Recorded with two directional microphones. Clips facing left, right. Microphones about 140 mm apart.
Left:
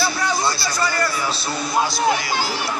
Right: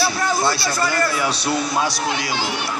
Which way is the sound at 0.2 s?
55° right (ahead or behind).